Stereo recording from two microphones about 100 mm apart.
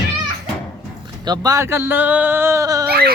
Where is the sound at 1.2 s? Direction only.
40° right (ahead or behind).